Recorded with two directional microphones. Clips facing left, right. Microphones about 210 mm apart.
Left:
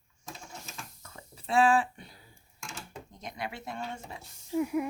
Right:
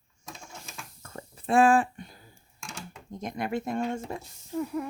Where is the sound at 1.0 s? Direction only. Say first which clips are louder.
Right 7 dB; 50° right (ahead or behind).